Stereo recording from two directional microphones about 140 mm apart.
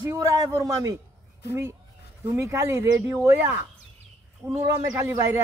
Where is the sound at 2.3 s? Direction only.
20° right (ahead or behind).